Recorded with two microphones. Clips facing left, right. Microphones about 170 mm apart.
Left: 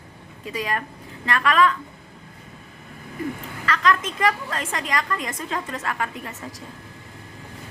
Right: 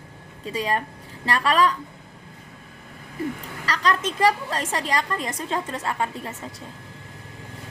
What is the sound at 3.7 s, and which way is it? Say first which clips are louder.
A woman's voice: left 2 dB; 35° right (ahead or behind).